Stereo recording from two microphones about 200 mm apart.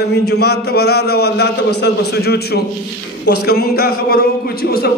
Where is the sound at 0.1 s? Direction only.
55° left (ahead or behind).